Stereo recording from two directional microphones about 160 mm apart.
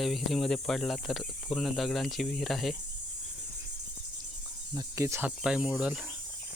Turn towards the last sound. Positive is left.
turn(degrees=-5)  # may be behind; listen again after turning